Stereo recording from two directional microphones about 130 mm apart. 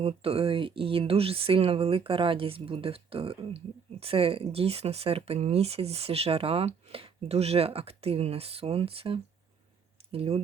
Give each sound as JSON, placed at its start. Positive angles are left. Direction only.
{"t": 0.0, "sound": "speech", "side_deg": -45}